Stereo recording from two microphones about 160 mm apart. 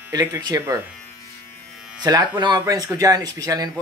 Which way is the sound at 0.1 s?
25° right (ahead or behind).